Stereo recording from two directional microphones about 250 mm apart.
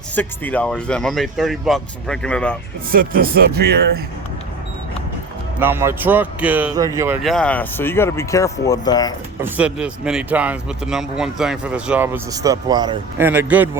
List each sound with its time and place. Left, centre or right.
0.2 s a man's voice: centre
2.9 s speech: right
5.5 s speech: centre
7.2 s speech: centre
9.4 s a man's voice: centre